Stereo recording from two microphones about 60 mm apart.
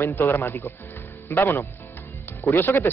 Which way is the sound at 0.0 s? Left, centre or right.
Left.